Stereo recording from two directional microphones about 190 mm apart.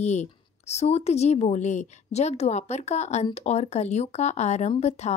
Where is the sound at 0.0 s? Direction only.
35° left (ahead or behind).